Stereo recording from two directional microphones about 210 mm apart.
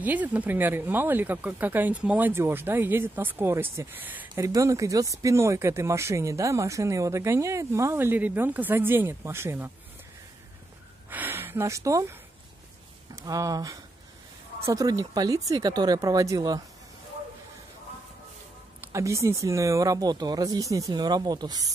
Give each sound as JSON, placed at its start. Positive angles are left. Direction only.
{"t": 0.0, "sound": "speech", "side_deg": -10}
{"t": 11.1, "sound": "speech", "side_deg": -10}
{"t": 18.9, "sound": "speech", "side_deg": -15}